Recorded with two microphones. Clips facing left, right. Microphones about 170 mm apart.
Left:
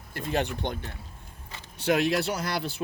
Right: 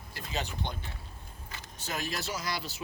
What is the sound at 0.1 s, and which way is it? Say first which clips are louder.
Speech: left 9 dB; 60° left (ahead or behind).